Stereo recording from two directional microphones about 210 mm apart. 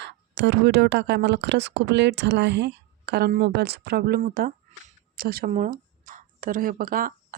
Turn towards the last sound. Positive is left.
turn(degrees=-45)  # may be behind; listen again after turning